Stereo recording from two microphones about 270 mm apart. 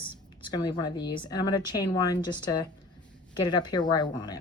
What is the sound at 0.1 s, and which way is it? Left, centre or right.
Speech, centre.